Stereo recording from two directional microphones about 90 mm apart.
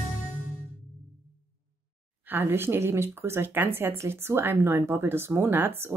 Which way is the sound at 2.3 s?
25° right (ahead or behind).